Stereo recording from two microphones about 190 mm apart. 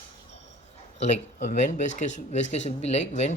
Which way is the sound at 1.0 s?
40° left (ahead or behind).